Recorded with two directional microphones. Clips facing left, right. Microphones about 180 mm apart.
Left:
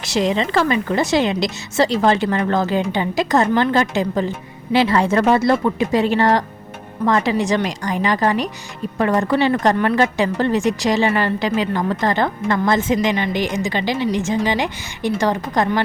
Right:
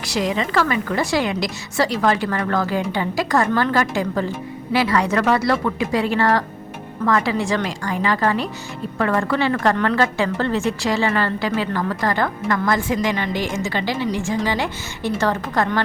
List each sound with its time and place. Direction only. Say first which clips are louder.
0.0 s a woman's voice: left 3 dB; 25° left (ahead or behind)